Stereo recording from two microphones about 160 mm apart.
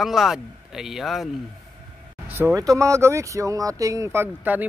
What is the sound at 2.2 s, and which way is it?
Speech, 10° right (ahead or behind).